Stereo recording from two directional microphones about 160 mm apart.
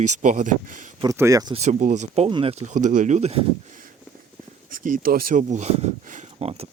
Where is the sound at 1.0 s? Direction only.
20° right (ahead or behind).